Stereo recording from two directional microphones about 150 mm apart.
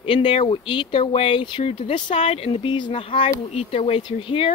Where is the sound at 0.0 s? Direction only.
35° left (ahead or behind).